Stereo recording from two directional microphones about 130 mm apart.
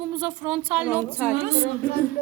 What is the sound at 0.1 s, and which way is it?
A woman's voice, 15° right (ahead or behind).